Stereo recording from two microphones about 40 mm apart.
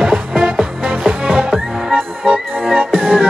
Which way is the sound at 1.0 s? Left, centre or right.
Centre.